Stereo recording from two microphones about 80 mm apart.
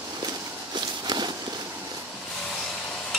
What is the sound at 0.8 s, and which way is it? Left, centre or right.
Walk, right.